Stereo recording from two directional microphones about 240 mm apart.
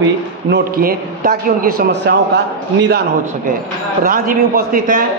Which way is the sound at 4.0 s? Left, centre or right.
Right.